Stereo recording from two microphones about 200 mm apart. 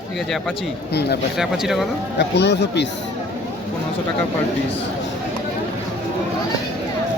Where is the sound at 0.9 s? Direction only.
55° left (ahead or behind).